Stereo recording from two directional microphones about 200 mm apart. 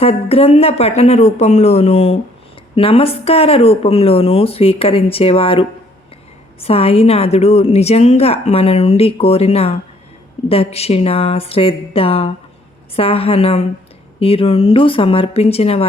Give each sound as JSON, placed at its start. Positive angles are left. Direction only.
{"t": 0.0, "sound": "a woman's voice", "side_deg": 30}